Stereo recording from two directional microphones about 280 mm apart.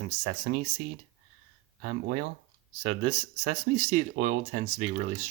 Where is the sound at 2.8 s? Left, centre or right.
Right.